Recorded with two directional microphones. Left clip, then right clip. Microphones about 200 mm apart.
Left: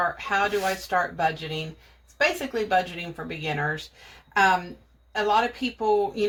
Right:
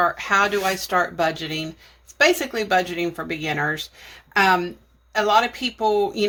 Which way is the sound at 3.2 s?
45° right (ahead or behind).